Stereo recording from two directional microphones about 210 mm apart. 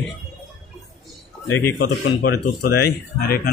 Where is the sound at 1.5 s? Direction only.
55° left (ahead or behind).